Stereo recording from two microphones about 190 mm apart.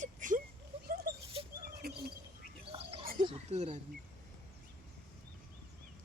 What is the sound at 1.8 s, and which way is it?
Bird, 55° right (ahead or behind).